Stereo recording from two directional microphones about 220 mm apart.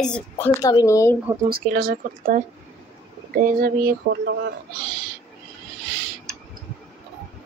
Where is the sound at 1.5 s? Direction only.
45° right (ahead or behind).